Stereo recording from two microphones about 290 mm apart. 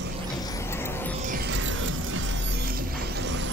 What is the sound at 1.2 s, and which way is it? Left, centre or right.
Music, right.